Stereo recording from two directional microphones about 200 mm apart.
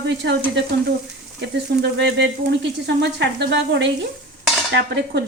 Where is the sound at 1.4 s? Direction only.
60° right (ahead or behind).